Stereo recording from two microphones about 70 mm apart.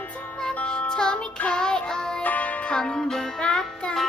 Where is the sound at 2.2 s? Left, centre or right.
Left.